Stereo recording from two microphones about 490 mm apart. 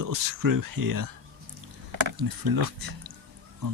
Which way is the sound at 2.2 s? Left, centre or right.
Right.